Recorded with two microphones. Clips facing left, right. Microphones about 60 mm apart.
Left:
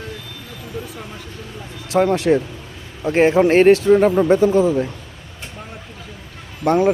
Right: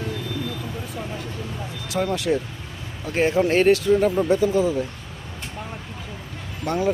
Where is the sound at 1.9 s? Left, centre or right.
Left.